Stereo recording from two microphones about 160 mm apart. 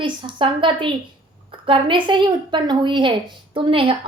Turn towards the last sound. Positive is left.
turn(degrees=-35)  # may be behind; listen again after turning